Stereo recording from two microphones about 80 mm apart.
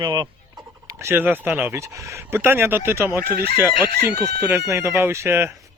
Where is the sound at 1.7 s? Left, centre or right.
Right.